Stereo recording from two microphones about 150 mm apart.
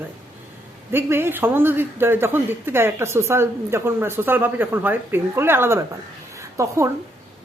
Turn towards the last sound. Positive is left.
turn(degrees=-20)  # may be behind; listen again after turning